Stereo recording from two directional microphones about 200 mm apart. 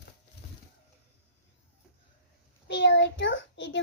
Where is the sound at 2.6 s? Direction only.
60° left (ahead or behind).